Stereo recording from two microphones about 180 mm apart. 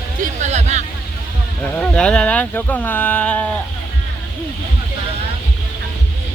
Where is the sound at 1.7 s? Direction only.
10° left (ahead or behind).